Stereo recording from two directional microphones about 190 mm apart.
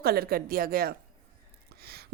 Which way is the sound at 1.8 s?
55° right (ahead or behind).